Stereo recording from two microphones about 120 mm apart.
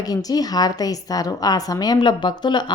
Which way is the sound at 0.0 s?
30° left (ahead or behind).